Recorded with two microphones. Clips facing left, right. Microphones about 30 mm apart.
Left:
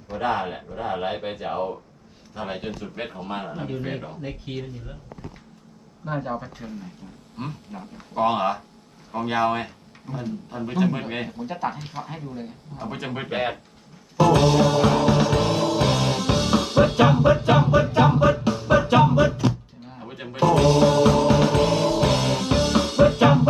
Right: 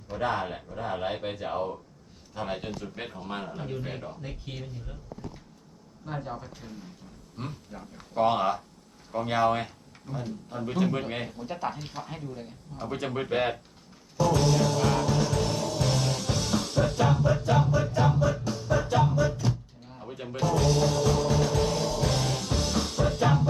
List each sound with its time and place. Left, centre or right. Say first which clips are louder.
0.1 s speech: left 4 dB; left
2.6 s speech: left 5 dB; left
6.1 s speech: left 8 dB; left
7.3 s speech: left 5 dB; left
14.2 s music: left 7 dB; left
20.0 s music: left 1 dB; left
20.4 s music: left 8 dB; left